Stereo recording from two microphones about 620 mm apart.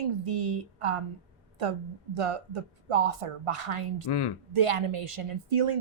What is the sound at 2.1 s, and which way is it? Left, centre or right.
A woman's voice, right.